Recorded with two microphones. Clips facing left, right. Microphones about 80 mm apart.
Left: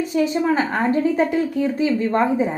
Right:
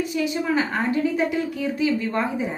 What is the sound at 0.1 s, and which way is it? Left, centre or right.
A woman's voice, left.